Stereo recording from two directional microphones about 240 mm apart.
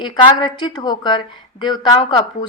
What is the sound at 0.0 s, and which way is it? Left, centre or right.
A woman's voice, centre.